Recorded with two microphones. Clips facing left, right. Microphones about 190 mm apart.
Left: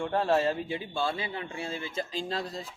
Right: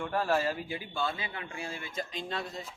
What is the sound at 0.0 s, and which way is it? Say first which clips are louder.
Speech: left 3 dB; 25° left (ahead or behind).